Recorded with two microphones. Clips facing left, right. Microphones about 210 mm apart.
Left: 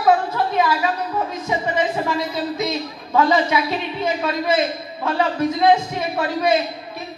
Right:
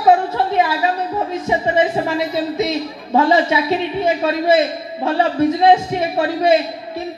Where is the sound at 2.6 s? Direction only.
25° right (ahead or behind).